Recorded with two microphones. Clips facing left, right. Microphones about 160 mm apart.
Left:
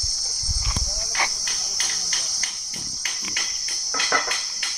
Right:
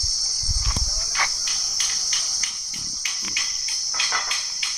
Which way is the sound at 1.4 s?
45° left (ahead or behind).